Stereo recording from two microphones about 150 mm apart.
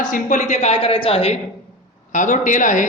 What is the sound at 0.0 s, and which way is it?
A woman's voice, 60° left (ahead or behind).